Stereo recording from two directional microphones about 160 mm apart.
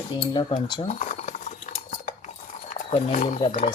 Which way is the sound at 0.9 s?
50° left (ahead or behind).